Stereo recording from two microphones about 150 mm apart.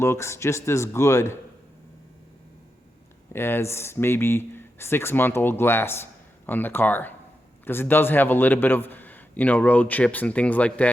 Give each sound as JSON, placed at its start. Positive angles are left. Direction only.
{"t": 0.0, "sound": "speech", "side_deg": 15}
{"t": 3.3, "sound": "speech", "side_deg": 15}